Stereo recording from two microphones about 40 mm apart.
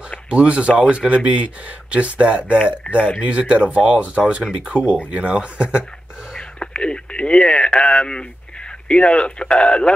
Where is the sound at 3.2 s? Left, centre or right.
Right.